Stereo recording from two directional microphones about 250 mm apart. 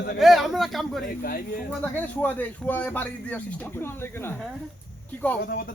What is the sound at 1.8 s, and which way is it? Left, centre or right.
Speech, centre.